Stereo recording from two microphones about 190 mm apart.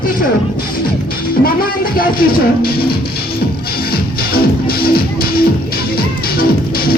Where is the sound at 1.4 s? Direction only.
50° left (ahead or behind).